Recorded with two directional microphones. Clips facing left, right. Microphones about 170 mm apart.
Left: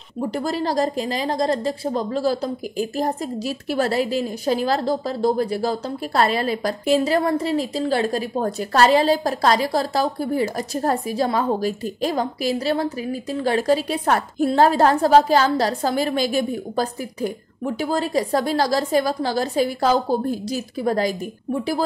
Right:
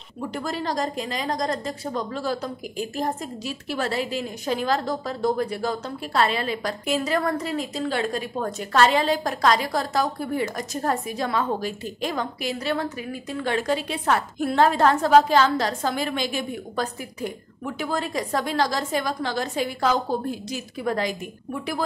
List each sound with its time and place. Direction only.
0.2 s a woman's voice: 35° left (ahead or behind)